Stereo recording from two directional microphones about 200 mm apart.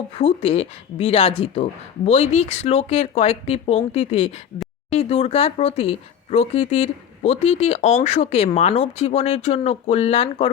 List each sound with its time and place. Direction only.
0.2 s speech: 30° left (ahead or behind)